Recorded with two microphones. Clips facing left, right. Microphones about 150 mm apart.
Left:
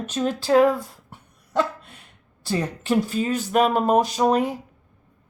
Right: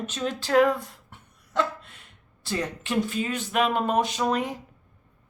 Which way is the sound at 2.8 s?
40° left (ahead or behind).